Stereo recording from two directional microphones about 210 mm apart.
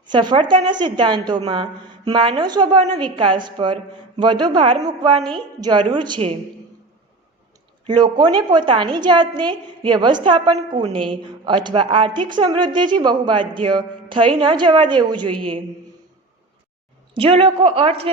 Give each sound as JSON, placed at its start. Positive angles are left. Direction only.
{"t": 0.1, "sound": "a woman's voice", "side_deg": -20}
{"t": 7.9, "sound": "a woman's voice", "side_deg": -20}
{"t": 17.2, "sound": "a woman's voice", "side_deg": -25}